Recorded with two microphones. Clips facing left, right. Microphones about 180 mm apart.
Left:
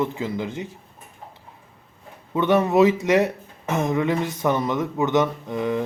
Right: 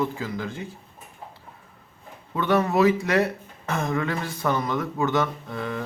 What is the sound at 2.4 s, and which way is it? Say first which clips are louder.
Speech: left 4 dB; 20° left (ahead or behind).